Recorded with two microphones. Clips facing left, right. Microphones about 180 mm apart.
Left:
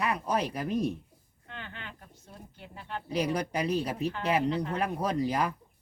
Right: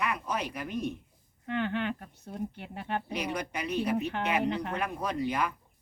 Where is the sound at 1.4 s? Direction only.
65° right (ahead or behind).